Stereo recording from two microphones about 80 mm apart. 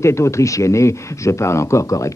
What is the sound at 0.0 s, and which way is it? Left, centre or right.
Speech, left.